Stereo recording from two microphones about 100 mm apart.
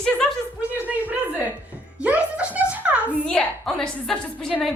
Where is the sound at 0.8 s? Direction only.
15° right (ahead or behind).